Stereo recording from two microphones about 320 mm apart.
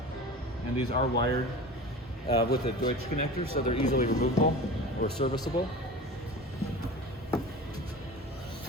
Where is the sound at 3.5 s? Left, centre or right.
Left.